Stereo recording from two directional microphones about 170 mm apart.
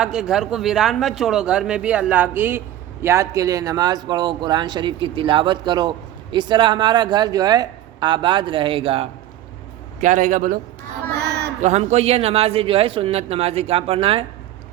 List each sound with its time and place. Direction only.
0.0 s a man's voice: 5° right (ahead or behind); by 9.0 s 35° right (ahead or behind)
10.0 s a man's voice: 45° right (ahead or behind)
11.1 s a sound: 75° right (ahead or behind)
11.6 s speech: 40° right (ahead or behind)